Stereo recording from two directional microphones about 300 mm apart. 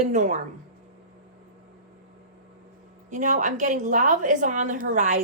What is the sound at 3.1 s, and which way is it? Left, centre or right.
A woman's voice, right.